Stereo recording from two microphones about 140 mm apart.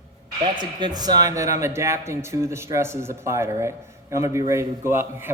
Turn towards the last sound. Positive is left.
turn(degrees=-15)  # may be behind; listen again after turning